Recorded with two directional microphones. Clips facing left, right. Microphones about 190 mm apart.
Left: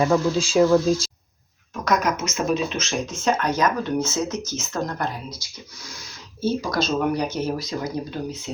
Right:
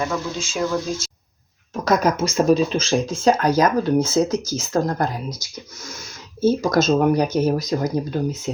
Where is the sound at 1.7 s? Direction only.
30° right (ahead or behind).